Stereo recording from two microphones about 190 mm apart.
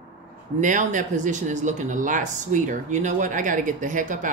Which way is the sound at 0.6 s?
40° right (ahead or behind).